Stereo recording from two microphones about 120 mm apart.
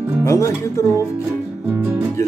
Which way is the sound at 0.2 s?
25° left (ahead or behind).